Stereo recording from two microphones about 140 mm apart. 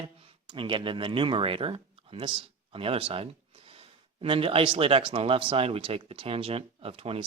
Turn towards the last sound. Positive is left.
turn(degrees=-45)  # may be behind; listen again after turning